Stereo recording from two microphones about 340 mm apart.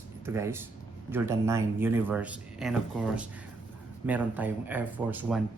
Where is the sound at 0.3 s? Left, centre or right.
Centre.